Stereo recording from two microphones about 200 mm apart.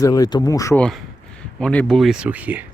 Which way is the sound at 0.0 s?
20° left (ahead or behind).